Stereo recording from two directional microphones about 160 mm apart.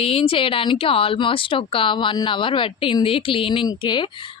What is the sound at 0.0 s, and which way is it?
Speech, 35° left (ahead or behind).